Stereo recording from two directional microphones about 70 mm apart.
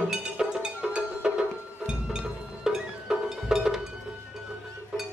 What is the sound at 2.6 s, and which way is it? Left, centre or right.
Music, centre.